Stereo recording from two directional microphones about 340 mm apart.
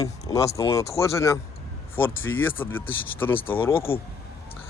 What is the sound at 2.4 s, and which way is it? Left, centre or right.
Speech, centre.